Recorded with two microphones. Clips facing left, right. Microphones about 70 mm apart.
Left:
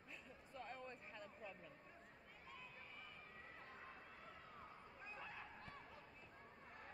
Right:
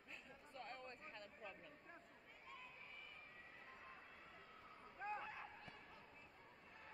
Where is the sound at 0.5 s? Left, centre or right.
Centre.